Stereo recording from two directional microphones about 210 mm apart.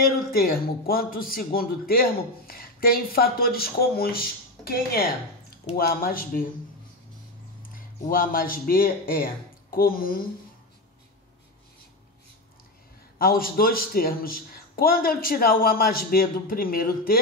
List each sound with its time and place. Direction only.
0.0 s a man's voice: 45° left (ahead or behind)
7.7 s speech: 40° left (ahead or behind)
13.2 s a man's voice: 45° left (ahead or behind)